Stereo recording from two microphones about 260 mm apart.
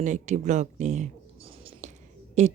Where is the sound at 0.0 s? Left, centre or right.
Right.